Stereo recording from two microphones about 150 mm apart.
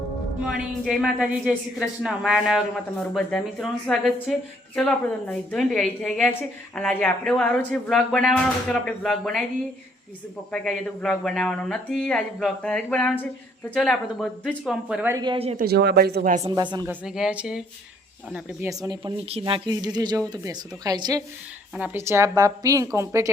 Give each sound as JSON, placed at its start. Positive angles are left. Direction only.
{"t": 0.9, "sound": "a woman's voice", "side_deg": 0}
{"t": 10.5, "sound": "a woman's voice", "side_deg": 5}
{"t": 15.1, "sound": "speech", "side_deg": -30}
{"t": 15.5, "sound": "speech", "side_deg": -90}
{"t": 16.5, "sound": "speech", "side_deg": -25}
{"t": 16.8, "sound": "a woman's voice", "side_deg": -10}
{"t": 18.7, "sound": "speech", "side_deg": -25}